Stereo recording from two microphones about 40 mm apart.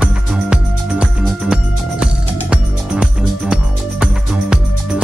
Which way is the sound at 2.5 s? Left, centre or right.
Right.